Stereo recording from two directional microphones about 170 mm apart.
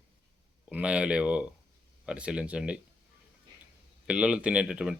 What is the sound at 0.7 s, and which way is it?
Speech, 5° right (ahead or behind).